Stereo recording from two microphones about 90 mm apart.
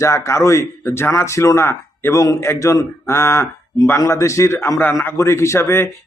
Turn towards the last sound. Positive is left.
turn(degrees=30)  # may be behind; listen again after turning